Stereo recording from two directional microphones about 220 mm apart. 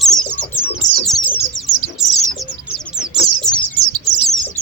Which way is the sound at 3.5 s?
35° left (ahead or behind).